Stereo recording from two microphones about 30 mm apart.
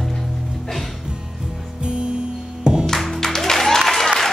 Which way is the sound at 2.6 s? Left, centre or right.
Right.